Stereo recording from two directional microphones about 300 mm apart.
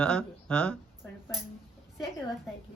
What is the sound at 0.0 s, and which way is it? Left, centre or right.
Speech, centre.